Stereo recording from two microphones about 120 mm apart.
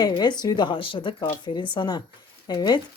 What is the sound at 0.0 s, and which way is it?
A woman's voice, 35° left (ahead or behind).